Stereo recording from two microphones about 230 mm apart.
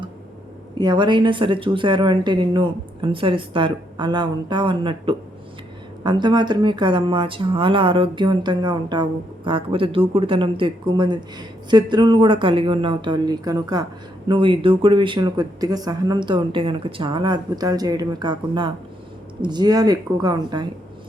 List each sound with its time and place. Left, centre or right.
0.8 s a woman's voice: centre